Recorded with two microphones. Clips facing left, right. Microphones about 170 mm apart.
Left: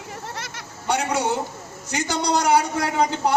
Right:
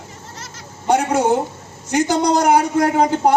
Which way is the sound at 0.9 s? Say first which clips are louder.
Right 7 dB; 50° right (ahead or behind).